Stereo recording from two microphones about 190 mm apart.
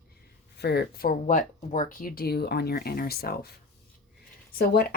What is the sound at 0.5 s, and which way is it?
Speech, 60° left (ahead or behind).